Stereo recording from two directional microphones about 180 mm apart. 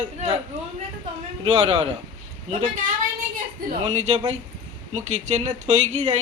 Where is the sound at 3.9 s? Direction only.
40° right (ahead or behind).